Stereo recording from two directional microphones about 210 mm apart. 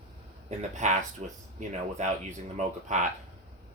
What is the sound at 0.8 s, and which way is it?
Speech, 35° right (ahead or behind).